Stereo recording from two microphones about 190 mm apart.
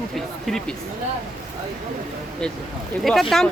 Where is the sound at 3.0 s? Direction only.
Centre (ahead or behind).